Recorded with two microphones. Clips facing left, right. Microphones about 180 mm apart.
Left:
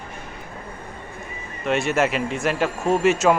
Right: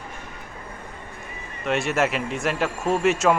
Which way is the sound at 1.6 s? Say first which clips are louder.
Left 2 dB; centre (ahead or behind).